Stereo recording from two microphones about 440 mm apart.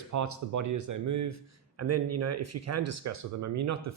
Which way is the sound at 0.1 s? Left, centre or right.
Right.